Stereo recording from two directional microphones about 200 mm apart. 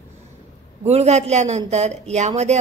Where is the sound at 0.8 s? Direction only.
30° right (ahead or behind).